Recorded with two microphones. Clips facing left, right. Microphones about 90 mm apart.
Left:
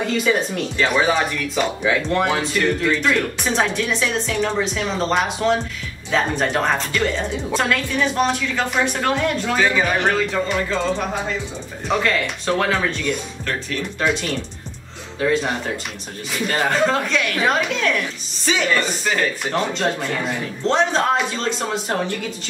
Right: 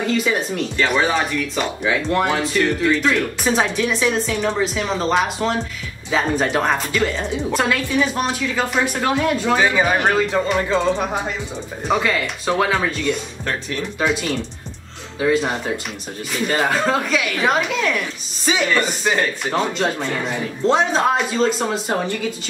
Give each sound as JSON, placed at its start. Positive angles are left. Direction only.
{"t": 0.0, "sound": "speech", "side_deg": 0}
{"t": 9.6, "sound": "speech", "side_deg": -15}
{"t": 11.9, "sound": "speech", "side_deg": -5}
{"t": 19.4, "sound": "speech", "side_deg": 0}